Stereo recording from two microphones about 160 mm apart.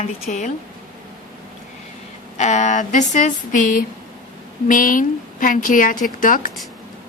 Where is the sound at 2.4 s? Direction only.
45° left (ahead or behind).